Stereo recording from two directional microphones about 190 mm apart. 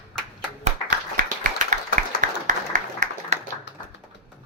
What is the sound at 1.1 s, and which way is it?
Clapping, 45° right (ahead or behind).